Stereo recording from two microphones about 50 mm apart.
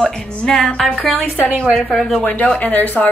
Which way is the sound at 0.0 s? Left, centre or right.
Centre.